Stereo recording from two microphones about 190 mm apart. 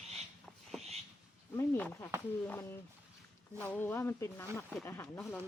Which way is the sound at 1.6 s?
10° left (ahead or behind).